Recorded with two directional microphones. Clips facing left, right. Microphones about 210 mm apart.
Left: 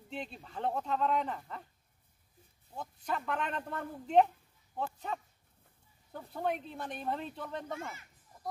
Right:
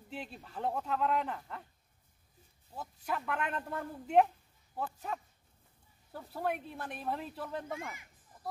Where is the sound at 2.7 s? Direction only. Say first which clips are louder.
Left 1 dB; 5° right (ahead or behind).